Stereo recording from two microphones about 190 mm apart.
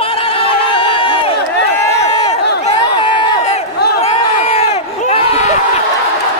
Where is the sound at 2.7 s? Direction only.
25° left (ahead or behind).